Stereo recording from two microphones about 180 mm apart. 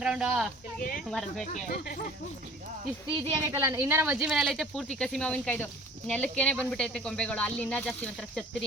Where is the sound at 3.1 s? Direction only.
20° right (ahead or behind).